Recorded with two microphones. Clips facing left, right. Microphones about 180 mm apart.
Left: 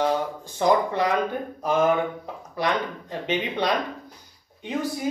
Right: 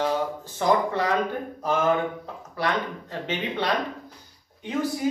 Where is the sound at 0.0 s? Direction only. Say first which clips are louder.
Left 1 dB; 15° left (ahead or behind).